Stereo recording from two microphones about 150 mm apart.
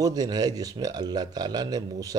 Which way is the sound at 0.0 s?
25° right (ahead or behind).